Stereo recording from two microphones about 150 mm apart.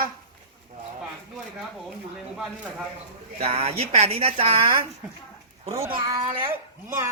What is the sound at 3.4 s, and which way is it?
Speech, 45° right (ahead or behind).